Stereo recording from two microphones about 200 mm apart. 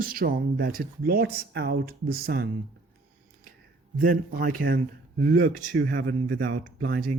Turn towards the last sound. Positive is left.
turn(degrees=-45)  # may be behind; listen again after turning